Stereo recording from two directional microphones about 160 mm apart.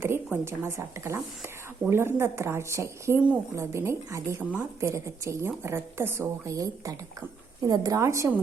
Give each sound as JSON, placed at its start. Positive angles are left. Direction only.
{"t": 0.0, "sound": "speech", "side_deg": -15}